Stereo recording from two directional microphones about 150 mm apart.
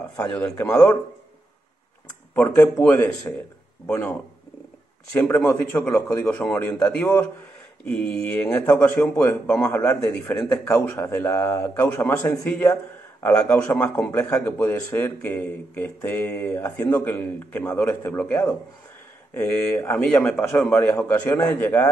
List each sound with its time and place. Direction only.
0.1 s a man's voice: 10° left (ahead or behind)
2.3 s a man's voice: 15° left (ahead or behind)